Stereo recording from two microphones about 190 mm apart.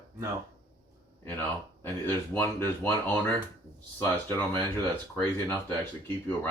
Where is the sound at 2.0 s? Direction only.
10° left (ahead or behind).